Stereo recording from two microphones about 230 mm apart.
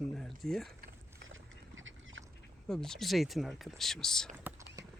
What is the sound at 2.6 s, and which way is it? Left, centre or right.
Speech, centre.